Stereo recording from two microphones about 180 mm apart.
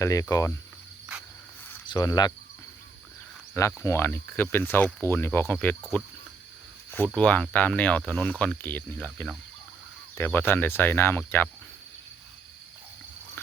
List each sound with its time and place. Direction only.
0.0 s speech: 20° left (ahead or behind)
1.9 s speech: 25° left (ahead or behind)
3.5 s speech: 15° left (ahead or behind)
7.2 s speech: 5° left (ahead or behind)